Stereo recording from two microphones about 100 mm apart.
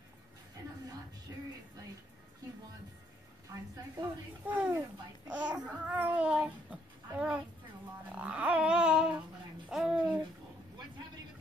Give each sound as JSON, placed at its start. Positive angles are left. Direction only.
{"t": 4.5, "sound": "a child's voice", "side_deg": -15}
{"t": 8.1, "sound": "dog", "side_deg": -15}
{"t": 9.7, "sound": "a sound", "side_deg": -5}